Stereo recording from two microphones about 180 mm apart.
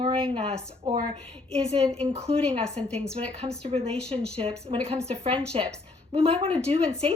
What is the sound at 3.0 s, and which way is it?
Speech, 35° right (ahead or behind).